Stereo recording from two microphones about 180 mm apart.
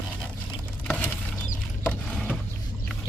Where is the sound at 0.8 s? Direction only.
10° left (ahead or behind).